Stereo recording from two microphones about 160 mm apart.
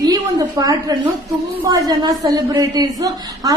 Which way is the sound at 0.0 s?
25° right (ahead or behind).